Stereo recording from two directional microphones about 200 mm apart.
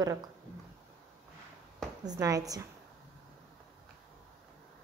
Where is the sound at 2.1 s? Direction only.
15° right (ahead or behind).